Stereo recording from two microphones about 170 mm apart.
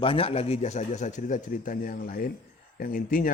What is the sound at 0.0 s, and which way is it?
A man's voice, 30° left (ahead or behind).